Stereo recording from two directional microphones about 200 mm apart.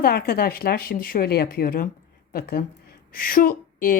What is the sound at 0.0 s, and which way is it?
Speech, 50° left (ahead or behind).